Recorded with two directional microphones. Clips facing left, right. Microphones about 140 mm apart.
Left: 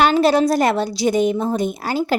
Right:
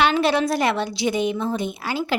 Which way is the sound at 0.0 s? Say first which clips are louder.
Left 4 dB; 40° left (ahead or behind).